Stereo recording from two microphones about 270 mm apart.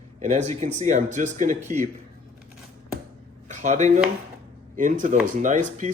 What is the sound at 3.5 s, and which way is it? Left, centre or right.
Speech, right.